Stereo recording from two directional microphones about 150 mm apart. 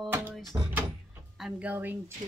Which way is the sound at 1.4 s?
5° right (ahead or behind).